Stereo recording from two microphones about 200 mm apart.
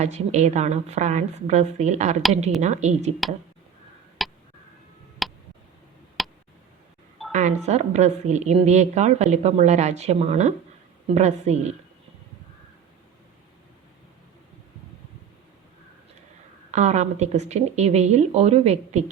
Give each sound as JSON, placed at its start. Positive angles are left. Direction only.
{"t": 0.0, "sound": "a woman's voice", "side_deg": -35}
{"t": 4.2, "sound": "a sound", "side_deg": 0}
{"t": 5.2, "sound": "tick", "side_deg": 0}
{"t": 6.2, "sound": "a sound", "side_deg": 0}
{"t": 7.3, "sound": "a woman's voice", "side_deg": -35}
{"t": 16.7, "sound": "a woman's voice", "side_deg": -35}